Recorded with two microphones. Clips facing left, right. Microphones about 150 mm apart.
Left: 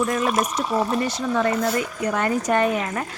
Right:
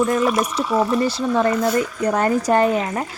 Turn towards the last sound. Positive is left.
turn(degrees=-25)  # may be behind; listen again after turning